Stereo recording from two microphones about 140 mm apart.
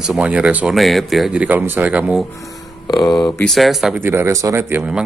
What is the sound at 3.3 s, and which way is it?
Speech, 5° left (ahead or behind).